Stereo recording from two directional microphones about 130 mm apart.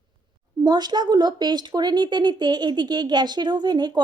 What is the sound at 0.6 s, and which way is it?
Speech, 35° right (ahead or behind).